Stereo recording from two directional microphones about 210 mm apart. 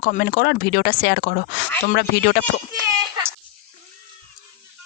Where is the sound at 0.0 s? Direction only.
45° left (ahead or behind).